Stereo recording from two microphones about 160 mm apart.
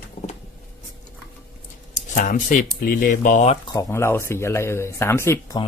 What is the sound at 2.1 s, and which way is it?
Speech, 55° left (ahead or behind).